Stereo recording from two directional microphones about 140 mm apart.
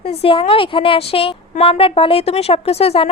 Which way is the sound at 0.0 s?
45° left (ahead or behind).